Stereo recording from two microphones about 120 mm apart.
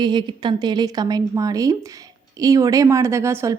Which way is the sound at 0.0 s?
40° right (ahead or behind).